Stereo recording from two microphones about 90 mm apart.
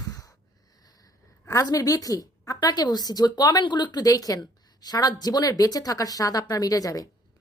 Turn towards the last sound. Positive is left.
turn(degrees=40)  # may be behind; listen again after turning